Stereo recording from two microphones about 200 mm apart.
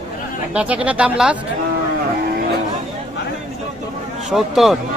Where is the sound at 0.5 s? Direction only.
5° right (ahead or behind).